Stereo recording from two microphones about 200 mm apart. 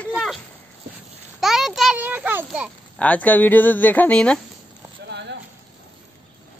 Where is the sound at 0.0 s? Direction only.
Centre (ahead or behind).